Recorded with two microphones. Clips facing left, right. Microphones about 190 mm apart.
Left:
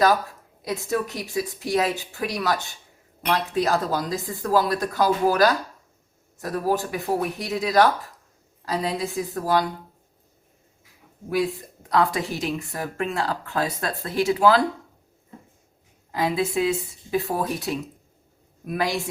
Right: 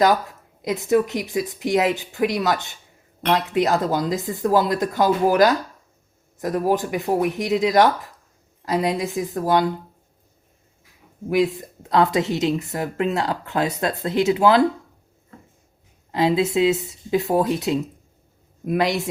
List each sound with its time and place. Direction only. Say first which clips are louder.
0.6 s a woman's voice: right 7 dB; 20° right (ahead or behind)
11.3 s a woman's voice: right 4 dB; 20° right (ahead or behind)
16.1 s a woman's voice: right 4 dB; 25° right (ahead or behind)